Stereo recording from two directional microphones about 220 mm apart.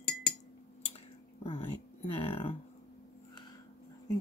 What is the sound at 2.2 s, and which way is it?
Speech, 25° left (ahead or behind).